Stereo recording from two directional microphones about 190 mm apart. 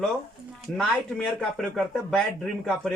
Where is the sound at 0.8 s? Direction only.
5° left (ahead or behind).